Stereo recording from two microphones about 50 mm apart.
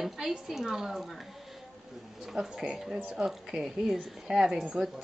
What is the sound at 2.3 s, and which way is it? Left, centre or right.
Speech, centre.